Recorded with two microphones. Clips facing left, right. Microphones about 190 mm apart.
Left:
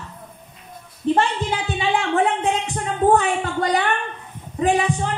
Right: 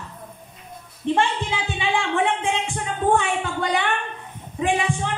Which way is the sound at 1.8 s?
40° left (ahead or behind).